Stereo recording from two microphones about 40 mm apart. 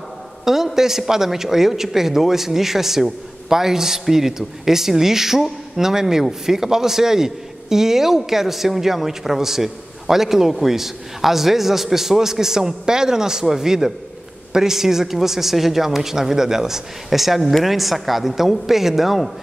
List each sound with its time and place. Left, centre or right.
0.7 s a man's voice: centre